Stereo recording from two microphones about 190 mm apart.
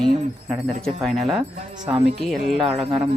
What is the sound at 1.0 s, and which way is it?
Speech, centre (ahead or behind).